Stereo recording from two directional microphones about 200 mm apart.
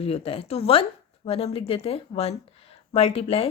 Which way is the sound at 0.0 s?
30° left (ahead or behind).